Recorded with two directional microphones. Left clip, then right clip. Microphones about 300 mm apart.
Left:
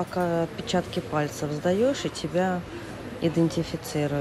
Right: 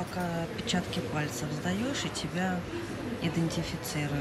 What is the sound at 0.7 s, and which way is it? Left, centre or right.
Speech, centre.